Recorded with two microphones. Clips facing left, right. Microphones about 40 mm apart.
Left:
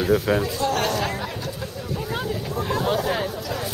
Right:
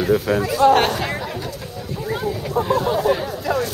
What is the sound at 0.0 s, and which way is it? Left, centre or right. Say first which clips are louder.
Speech: right 2 dB; centre.